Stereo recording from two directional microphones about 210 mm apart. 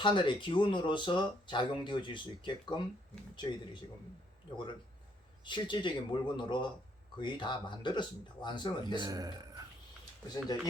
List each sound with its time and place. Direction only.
0.0 s speech: 20° left (ahead or behind)
5.5 s speech: 20° left (ahead or behind)
9.0 s speech: 20° right (ahead or behind)